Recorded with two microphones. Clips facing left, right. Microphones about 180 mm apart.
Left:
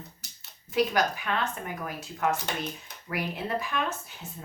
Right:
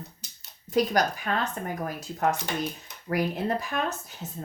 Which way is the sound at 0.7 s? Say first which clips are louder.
Right 2 dB; 40° right (ahead or behind).